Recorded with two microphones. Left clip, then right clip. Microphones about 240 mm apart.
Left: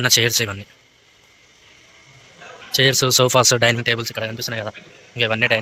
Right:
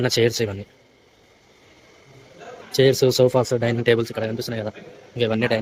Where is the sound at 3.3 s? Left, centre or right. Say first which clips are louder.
Left 5 dB; left.